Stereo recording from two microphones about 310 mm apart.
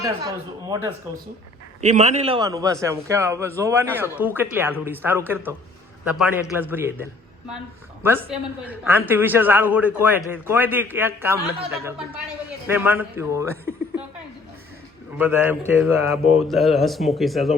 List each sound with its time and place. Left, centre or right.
0.0 s speech: centre
1.8 s a man's voice: right; by 6.9 s centre
8.3 s a man's voice: centre
15.2 s a man's voice: centre